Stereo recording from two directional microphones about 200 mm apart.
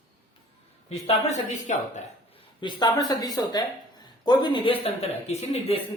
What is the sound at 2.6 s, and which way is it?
Speech, 25° left (ahead or behind).